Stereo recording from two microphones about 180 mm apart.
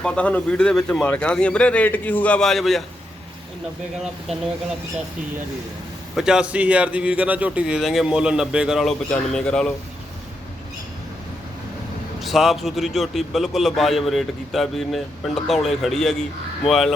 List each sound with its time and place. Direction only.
0.0 s speech: 5° left (ahead or behind)
6.1 s a man's voice: 5° right (ahead or behind)
12.2 s a man's voice: centre (ahead or behind)